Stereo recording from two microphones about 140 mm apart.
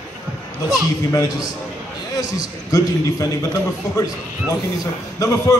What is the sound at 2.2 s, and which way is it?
A man's voice, 25° left (ahead or behind).